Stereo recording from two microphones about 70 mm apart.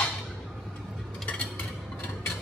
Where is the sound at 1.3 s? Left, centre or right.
Left.